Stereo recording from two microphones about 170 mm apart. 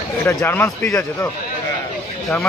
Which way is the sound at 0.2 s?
15° left (ahead or behind).